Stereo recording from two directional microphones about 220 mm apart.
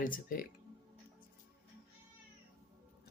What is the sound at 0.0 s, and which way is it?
Speech, 40° left (ahead or behind).